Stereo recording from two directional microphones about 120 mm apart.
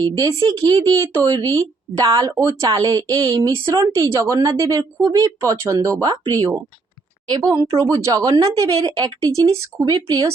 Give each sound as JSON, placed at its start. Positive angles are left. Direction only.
{"t": 0.2, "sound": "a woman's voice", "side_deg": -30}